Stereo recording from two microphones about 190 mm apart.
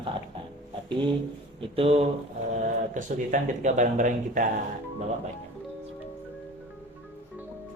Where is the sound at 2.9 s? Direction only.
40° right (ahead or behind).